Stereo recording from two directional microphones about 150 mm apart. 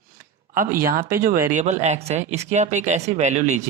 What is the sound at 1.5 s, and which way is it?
Speech, 50° right (ahead or behind).